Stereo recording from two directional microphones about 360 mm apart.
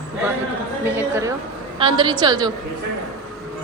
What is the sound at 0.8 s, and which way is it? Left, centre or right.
A woman's voice, centre.